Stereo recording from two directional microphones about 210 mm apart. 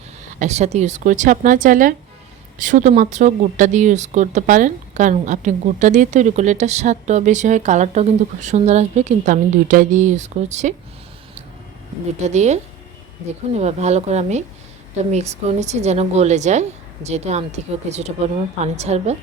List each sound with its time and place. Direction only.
0.3 s speech: 35° right (ahead or behind)
12.2 s speech: 35° right (ahead or behind)
13.6 s speech: 30° right (ahead or behind)